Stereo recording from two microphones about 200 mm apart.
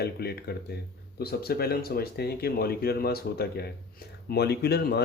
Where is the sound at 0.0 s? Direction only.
50° left (ahead or behind).